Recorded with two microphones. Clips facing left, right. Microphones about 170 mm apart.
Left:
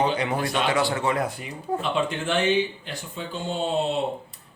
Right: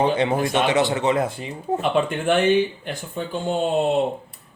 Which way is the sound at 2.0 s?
55° right (ahead or behind).